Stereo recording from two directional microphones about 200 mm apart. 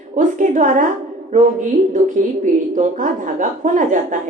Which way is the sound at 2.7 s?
40° right (ahead or behind).